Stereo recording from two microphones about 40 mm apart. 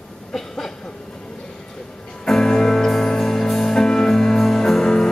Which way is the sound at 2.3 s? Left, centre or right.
Centre.